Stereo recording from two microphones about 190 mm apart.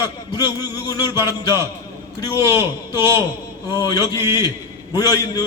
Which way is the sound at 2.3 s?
10° right (ahead or behind).